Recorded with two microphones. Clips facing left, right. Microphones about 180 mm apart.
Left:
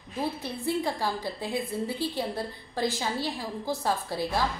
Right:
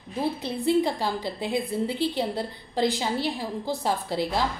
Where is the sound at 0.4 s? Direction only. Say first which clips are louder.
Right 6 dB; 20° right (ahead or behind).